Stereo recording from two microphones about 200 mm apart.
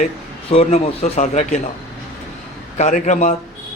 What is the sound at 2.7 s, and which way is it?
Speech, 35° left (ahead or behind).